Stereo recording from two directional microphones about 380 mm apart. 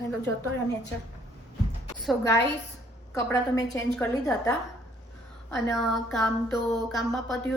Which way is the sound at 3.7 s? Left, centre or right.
Centre.